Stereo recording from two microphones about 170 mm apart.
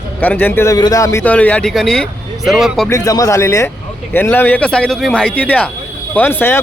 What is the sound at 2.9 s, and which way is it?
Speech, 20° left (ahead or behind).